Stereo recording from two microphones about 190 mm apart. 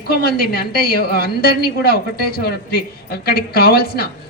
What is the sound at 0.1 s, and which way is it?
A woman's voice, 55° left (ahead or behind).